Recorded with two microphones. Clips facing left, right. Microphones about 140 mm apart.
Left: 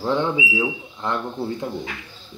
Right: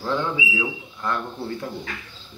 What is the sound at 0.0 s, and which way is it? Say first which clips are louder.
Speech: left 3 dB; 20° left (ahead or behind).